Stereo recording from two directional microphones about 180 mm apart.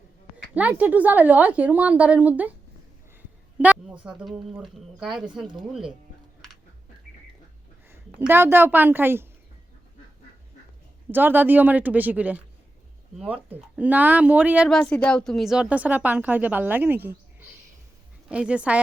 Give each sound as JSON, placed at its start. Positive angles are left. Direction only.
{"t": 0.5, "sound": "a woman's voice", "side_deg": -10}
{"t": 3.6, "sound": "speech", "side_deg": -10}
{"t": 7.9, "sound": "a woman's voice", "side_deg": -10}
{"t": 11.1, "sound": "a woman's voice", "side_deg": -10}
{"t": 14.8, "sound": "a woman's voice", "side_deg": 5}
{"t": 18.3, "sound": "a woman's voice", "side_deg": -5}